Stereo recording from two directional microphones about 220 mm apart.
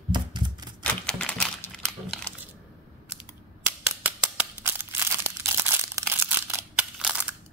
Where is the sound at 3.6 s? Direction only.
10° right (ahead or behind).